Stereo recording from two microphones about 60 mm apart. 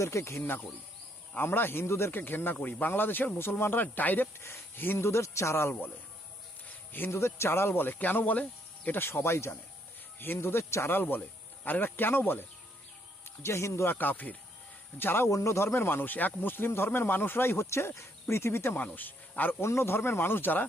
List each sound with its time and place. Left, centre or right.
0.0 s speech: left
4.4 s speech: left
7.1 s speech: left
9.0 s speech: left
10.9 s speech: left
13.4 s speech: left
13.9 s speech: left
14.9 s speech: left
15.3 s speech: left
15.6 s speech: left
18.8 s speech: left
19.6 s speech: left